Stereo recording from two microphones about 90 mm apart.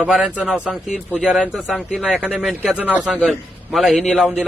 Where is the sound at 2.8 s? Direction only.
15° right (ahead or behind).